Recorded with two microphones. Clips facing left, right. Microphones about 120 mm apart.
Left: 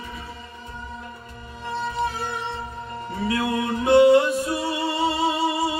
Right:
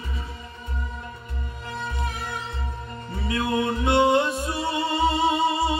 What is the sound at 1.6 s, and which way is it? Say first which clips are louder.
Music: left 6 dB; 30° left (ahead or behind).